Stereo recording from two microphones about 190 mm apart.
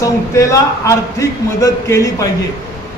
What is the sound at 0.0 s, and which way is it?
A man's voice, 15° left (ahead or behind).